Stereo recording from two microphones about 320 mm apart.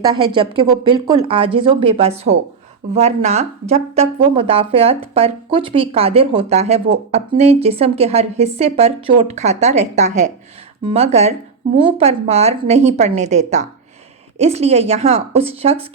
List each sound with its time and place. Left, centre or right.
0.0 s speech: centre